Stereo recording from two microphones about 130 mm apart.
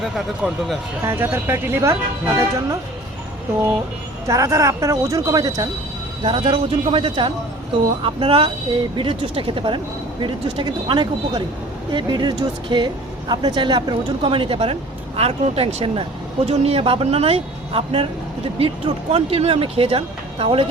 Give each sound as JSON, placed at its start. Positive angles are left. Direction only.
{"t": 0.4, "sound": "speech", "side_deg": 0}
{"t": 1.0, "sound": "speech", "side_deg": -15}
{"t": 4.3, "sound": "speech", "side_deg": -25}
{"t": 6.2, "sound": "speech", "side_deg": -40}